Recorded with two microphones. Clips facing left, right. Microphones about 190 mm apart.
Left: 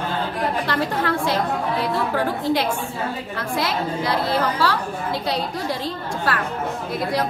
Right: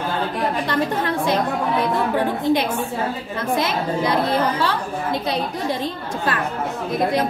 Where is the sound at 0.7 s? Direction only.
20° right (ahead or behind).